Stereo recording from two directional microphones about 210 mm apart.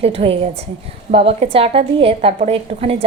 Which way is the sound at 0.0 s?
30° right (ahead or behind).